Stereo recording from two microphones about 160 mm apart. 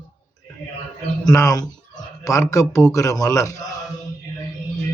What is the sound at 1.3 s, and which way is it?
A man's voice, 20° left (ahead or behind).